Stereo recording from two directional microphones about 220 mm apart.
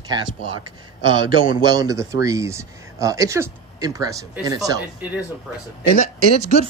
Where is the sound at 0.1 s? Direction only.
20° right (ahead or behind).